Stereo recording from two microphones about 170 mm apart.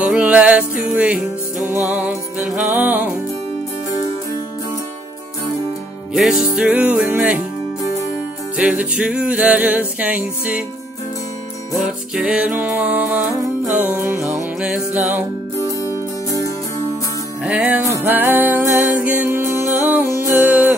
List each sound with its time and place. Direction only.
0.0 s music: 5° right (ahead or behind)
6.1 s music: centre (ahead or behind)
8.5 s music: 5° right (ahead or behind)
11.8 s music: 5° right (ahead or behind)
15.8 s music: 20° left (ahead or behind)
17.4 s music: 5° right (ahead or behind)